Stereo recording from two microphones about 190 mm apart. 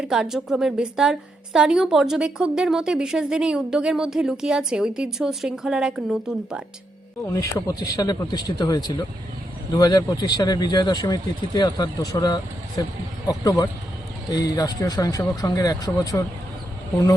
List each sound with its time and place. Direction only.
0.0 s a woman's voice: 5° right (ahead or behind)
7.3 s speech: 15° left (ahead or behind)